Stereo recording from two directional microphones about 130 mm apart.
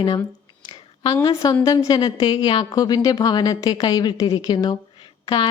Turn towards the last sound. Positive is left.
turn(degrees=35)  # may be behind; listen again after turning